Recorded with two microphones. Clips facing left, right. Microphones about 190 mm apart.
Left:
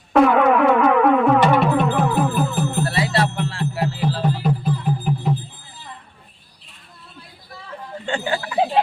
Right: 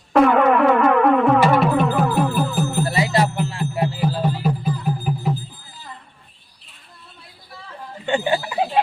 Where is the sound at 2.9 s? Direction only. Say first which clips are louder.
Right 1 dB; 15° right (ahead or behind).